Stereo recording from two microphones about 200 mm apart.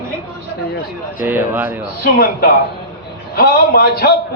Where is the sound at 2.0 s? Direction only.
50° left (ahead or behind).